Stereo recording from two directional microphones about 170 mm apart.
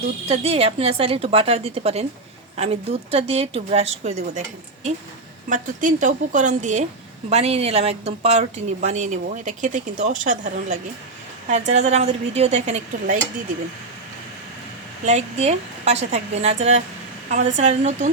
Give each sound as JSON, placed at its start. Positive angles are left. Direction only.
{"t": 0.3, "sound": "a woman's voice", "side_deg": -35}
{"t": 15.0, "sound": "a woman's voice", "side_deg": -40}